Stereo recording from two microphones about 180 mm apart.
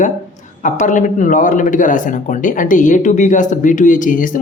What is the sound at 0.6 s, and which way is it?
Speech, 45° left (ahead or behind).